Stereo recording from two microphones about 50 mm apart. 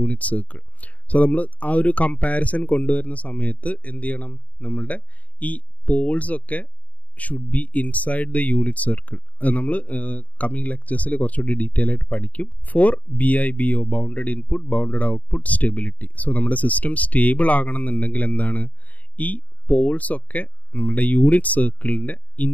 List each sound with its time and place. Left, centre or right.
0.0 s speech: left